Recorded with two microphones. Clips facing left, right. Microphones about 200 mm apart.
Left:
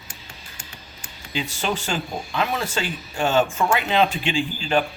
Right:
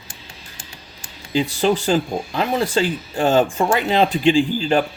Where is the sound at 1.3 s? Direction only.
35° right (ahead or behind).